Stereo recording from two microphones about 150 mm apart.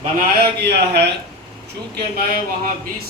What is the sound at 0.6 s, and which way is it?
Speech, 90° right.